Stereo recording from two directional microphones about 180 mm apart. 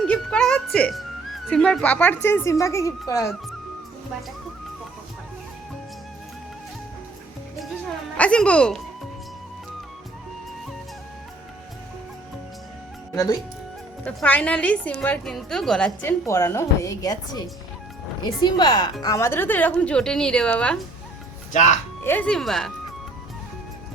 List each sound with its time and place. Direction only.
0.0 s music: 5° left (ahead or behind)
1.5 s a woman's voice: 5° left (ahead or behind)
8.1 s speech: 5° left (ahead or behind)
13.1 s speech: 20° left (ahead or behind)
14.0 s a woman's voice: 5° left (ahead or behind)
21.5 s speech: 45° left (ahead or behind)
22.0 s speech: 10° left (ahead or behind)